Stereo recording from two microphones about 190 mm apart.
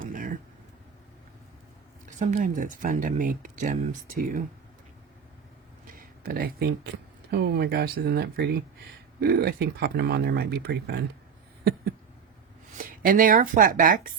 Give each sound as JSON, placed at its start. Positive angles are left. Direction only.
{"t": 0.0, "sound": "a sound", "side_deg": -45}
{"t": 2.0, "sound": "speech", "side_deg": -40}
{"t": 5.9, "sound": "speech", "side_deg": -50}
{"t": 12.7, "sound": "speech", "side_deg": -45}